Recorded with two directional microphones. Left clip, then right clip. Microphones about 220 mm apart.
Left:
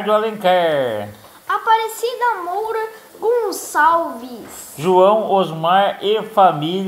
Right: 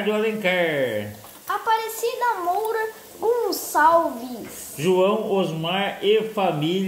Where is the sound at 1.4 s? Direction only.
5° right (ahead or behind).